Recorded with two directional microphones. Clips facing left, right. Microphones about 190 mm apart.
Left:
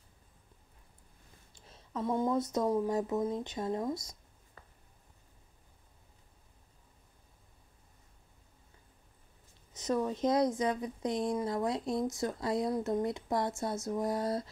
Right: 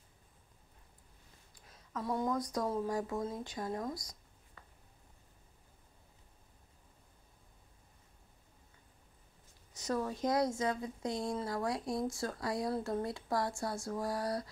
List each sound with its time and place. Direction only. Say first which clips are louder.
1.5 s a woman's voice: left 3 dB; 25° left (ahead or behind)
4.6 s a sound: left 2 dB; 40° left (ahead or behind)
9.8 s a woman's voice: left 4 dB; 20° left (ahead or behind)